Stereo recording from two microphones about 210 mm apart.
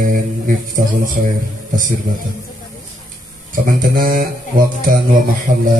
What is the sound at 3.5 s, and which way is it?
Speech, 40° right (ahead or behind).